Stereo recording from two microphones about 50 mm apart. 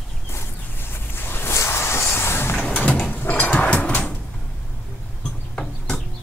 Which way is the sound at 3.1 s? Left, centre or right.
Left.